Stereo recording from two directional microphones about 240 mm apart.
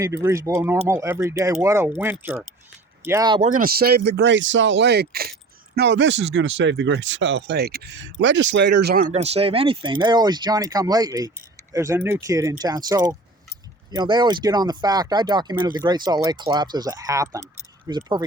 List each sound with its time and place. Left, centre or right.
0.0 s speech: centre
3.5 s speech: right; by 18.2 s centre